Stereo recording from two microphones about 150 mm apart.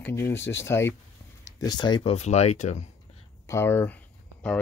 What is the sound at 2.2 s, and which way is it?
Speech, 45° left (ahead or behind).